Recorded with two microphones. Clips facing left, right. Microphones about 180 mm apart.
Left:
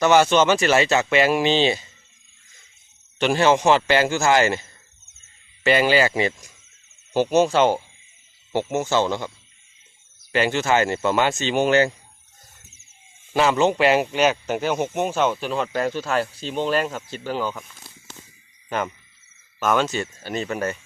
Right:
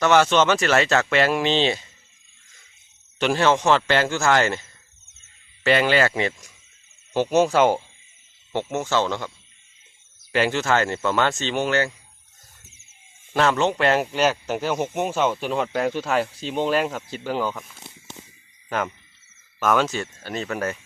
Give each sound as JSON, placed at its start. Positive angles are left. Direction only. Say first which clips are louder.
{"t": 0.0, "sound": "speech", "louder": "left 1 dB", "side_deg": 5}
{"t": 3.2, "sound": "speech", "louder": "left 2 dB", "side_deg": 5}
{"t": 5.6, "sound": "speech", "louder": "left 1 dB", "side_deg": 5}
{"t": 10.3, "sound": "speech", "louder": "left 1 dB", "side_deg": 0}
{"t": 13.3, "sound": "speech", "louder": "left 2 dB", "side_deg": 5}
{"t": 17.1, "sound": "speech", "louder": "right 1 dB", "side_deg": -15}
{"t": 17.4, "sound": "speech", "louder": "right 1 dB", "side_deg": 0}
{"t": 17.7, "sound": "walk", "louder": "right 3 dB", "side_deg": -25}
{"t": 19.5, "sound": "speech", "louder": "even", "side_deg": 0}